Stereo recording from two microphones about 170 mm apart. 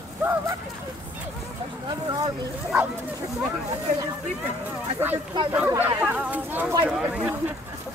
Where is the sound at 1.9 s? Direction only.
25° right (ahead or behind).